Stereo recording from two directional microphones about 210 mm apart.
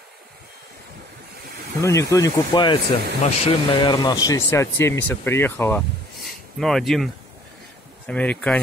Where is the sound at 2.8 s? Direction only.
55° right (ahead or behind).